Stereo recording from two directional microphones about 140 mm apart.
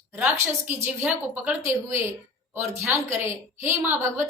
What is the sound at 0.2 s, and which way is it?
A woman's voice, 15° right (ahead or behind).